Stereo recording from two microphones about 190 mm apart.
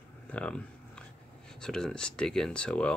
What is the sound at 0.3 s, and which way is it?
Speech, 5° left (ahead or behind).